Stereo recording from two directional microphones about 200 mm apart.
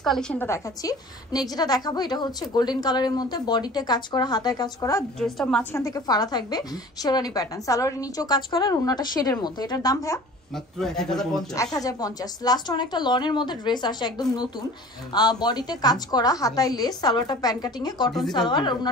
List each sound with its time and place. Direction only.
0.0 s a woman's voice: 5° left (ahead or behind); by 5.0 s 20° left (ahead or behind)
5.2 s a woman's voice: 5° left (ahead or behind)
10.5 s a man's voice: centre (ahead or behind)
11.5 s a woman's voice: 15° left (ahead or behind)